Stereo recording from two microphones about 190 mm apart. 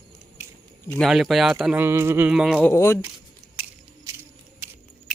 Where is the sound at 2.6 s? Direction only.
15° left (ahead or behind).